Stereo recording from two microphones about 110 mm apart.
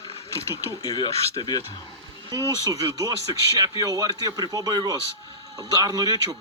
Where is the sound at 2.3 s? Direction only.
35° right (ahead or behind).